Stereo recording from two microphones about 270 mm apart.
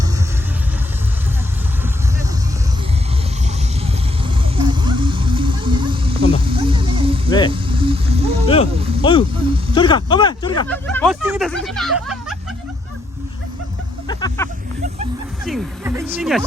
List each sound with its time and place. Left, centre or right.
3.8 s vehicle: centre
7.3 s vehicle: centre
7.5 s vehicle: centre
8.7 s a sound: right
9.7 s a sound: centre
10.7 s speech: centre
14.1 s music: centre
15.4 s music: centre
16.1 s speech: centre